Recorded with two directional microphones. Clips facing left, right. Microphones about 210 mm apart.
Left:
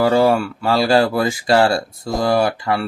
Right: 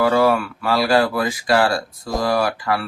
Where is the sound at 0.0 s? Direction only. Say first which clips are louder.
Left 2 dB; 30° left (ahead or behind).